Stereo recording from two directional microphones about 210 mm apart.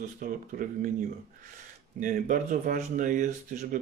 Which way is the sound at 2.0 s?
40° right (ahead or behind).